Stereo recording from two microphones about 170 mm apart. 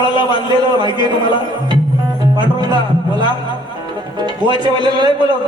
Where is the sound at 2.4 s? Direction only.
25° right (ahead or behind).